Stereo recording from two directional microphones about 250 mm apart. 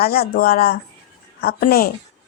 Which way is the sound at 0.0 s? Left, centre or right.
Left.